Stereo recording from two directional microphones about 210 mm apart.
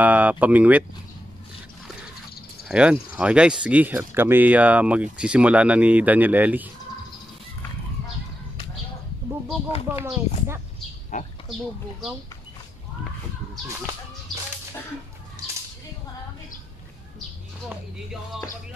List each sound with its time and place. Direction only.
0.0 s speech: 5° right (ahead or behind)
2.7 s speech: 5° right (ahead or behind)
10.0 s speech: 10° right (ahead or behind)
11.1 s speech: 35° left (ahead or behind)